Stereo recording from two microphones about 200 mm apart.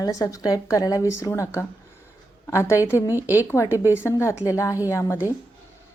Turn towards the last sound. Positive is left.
turn(degrees=15)  # may be behind; listen again after turning